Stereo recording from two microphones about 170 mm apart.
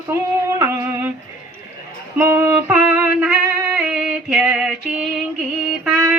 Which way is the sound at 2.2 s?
15° right (ahead or behind).